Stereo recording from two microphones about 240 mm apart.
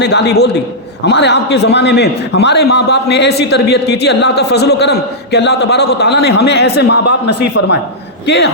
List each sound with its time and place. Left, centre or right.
0.0 s speech: left